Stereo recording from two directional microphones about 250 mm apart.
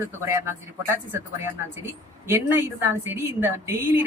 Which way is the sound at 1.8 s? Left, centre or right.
Centre.